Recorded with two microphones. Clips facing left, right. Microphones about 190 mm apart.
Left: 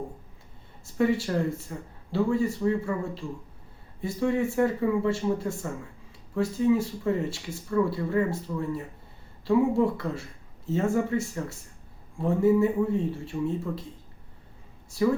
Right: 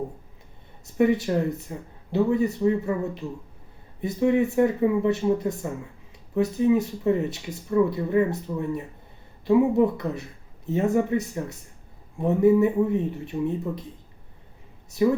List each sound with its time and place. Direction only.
0.9 s speech: 20° right (ahead or behind)
15.0 s speech: 20° right (ahead or behind)